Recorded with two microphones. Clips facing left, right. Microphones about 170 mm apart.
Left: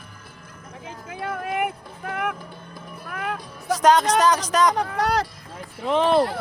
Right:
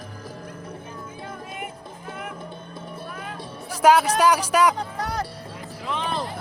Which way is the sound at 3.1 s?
70° left (ahead or behind).